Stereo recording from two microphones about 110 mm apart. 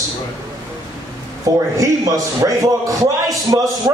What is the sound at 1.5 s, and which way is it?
A man's voice, 30° right (ahead or behind).